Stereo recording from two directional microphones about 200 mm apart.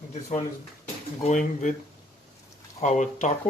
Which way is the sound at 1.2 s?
35° left (ahead or behind).